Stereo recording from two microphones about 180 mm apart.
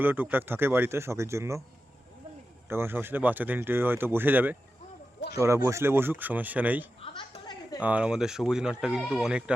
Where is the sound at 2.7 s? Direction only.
15° right (ahead or behind).